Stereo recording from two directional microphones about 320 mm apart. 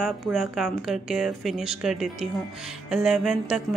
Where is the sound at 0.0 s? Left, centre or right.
Centre.